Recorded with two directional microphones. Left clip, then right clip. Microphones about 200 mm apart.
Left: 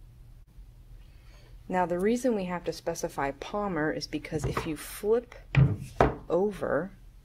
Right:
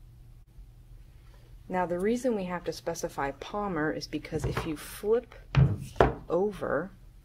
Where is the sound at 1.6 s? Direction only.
20° left (ahead or behind).